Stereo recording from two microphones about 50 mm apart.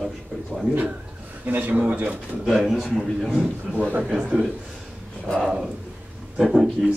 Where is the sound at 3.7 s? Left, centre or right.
Right.